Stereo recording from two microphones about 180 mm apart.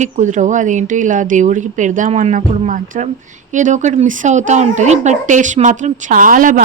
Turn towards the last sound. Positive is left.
turn(degrees=-45)  # may be behind; listen again after turning